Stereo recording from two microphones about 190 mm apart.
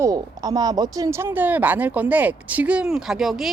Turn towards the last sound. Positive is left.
turn(degrees=0)  # may be behind; listen again after turning